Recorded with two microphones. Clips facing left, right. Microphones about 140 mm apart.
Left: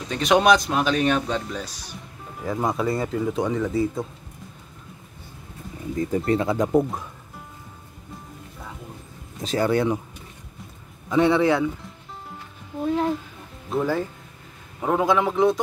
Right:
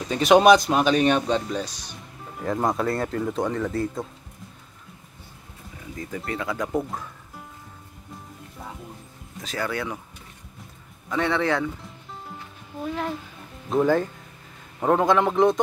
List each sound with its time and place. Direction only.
0.1 s speech: 5° right (ahead or behind)
5.9 s speech: 30° left (ahead or behind)
9.4 s speech: 25° left (ahead or behind)
11.1 s speech: 15° left (ahead or behind)
13.7 s speech: 5° left (ahead or behind)